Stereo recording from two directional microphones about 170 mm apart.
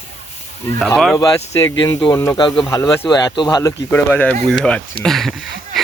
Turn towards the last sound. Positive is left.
turn(degrees=0)  # may be behind; listen again after turning